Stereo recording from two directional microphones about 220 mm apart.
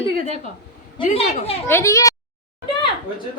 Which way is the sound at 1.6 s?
10° left (ahead or behind).